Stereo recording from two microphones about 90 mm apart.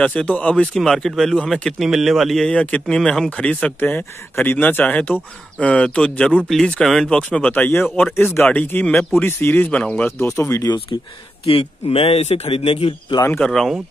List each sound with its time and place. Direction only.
0.0 s speech: 15° left (ahead or behind)
0.7 s a man's voice: 5° left (ahead or behind)
10.2 s speech: 30° left (ahead or behind)
11.4 s speech: 90° left
13.4 s a man's voice: 5° left (ahead or behind)